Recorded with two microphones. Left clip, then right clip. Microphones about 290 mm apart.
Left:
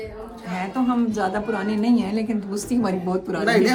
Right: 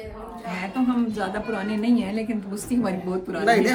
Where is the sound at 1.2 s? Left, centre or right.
Centre.